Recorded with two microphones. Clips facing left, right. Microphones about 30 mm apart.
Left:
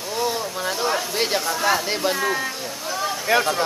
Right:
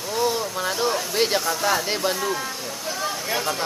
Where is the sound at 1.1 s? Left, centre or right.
Centre.